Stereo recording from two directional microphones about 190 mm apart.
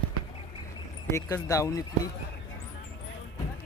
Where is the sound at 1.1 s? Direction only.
15° left (ahead or behind).